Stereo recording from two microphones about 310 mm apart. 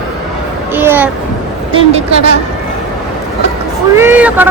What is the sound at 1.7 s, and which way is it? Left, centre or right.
Speech, centre.